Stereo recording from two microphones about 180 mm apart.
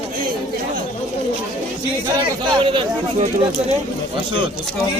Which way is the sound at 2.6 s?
30° right (ahead or behind).